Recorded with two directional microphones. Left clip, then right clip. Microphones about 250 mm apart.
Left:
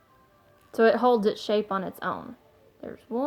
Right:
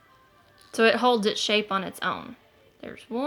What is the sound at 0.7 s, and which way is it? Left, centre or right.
Speech, right.